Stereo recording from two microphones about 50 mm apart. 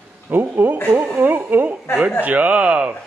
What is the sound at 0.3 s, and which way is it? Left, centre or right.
Speech, right.